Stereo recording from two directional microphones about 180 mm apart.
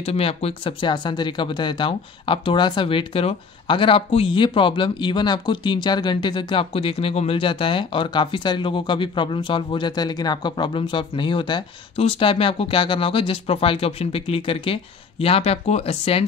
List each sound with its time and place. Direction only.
0.0 s speech: 35° left (ahead or behind)